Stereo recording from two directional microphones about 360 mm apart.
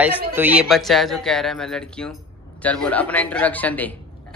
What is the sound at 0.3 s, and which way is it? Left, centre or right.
Speech, centre.